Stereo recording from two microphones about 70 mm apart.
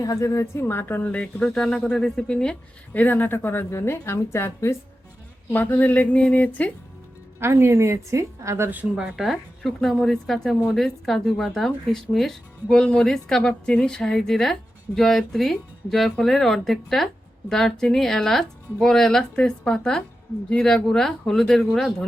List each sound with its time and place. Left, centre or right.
0.0 s speech: left; by 2.6 s centre
2.9 s a woman's voice: left
5.5 s speech: left
7.3 s a woman's voice: right
9.0 s speech: centre
9.2 s a woman's voice: centre